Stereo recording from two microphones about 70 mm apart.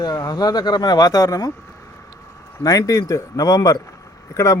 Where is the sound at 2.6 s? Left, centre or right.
Left.